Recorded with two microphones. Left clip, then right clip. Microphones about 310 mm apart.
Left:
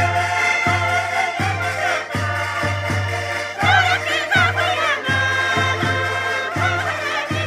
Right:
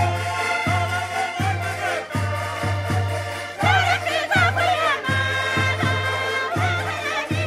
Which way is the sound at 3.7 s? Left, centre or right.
Right.